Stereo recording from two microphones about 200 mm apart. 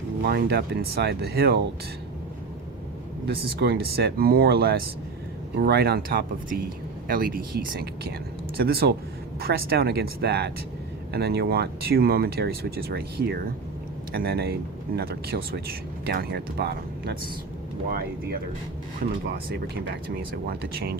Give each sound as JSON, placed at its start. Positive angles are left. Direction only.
{"t": 0.2, "sound": "speech", "side_deg": -55}
{"t": 3.2, "sound": "speech", "side_deg": -50}
{"t": 19.2, "sound": "speech", "side_deg": -55}